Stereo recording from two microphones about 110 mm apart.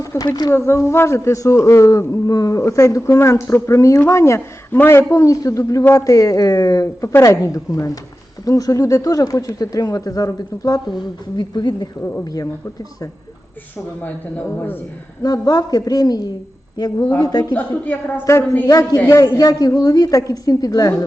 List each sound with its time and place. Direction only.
0.0 s a sound: 30° left (ahead or behind)
0.3 s speech: 40° left (ahead or behind)
0.5 s a man's voice: 25° left (ahead or behind)
14.0 s a man's voice: 20° left (ahead or behind)
15.2 s speech: 35° left (ahead or behind)
17.5 s a man's voice: 15° left (ahead or behind)
18.7 s speech: 35° left (ahead or behind)